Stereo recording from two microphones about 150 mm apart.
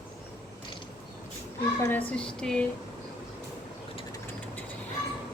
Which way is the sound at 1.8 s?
10° left (ahead or behind).